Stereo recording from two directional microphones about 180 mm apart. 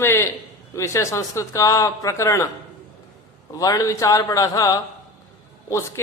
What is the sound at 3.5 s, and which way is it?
Speech, 20° left (ahead or behind).